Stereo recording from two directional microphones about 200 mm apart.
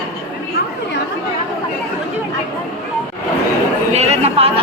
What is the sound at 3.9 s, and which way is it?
Speech, 35° right (ahead or behind).